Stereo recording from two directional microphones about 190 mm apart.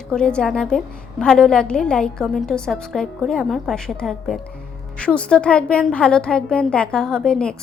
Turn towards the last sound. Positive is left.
turn(degrees=5)  # may be behind; listen again after turning